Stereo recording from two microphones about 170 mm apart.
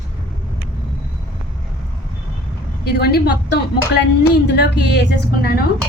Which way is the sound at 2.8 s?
70° left (ahead or behind).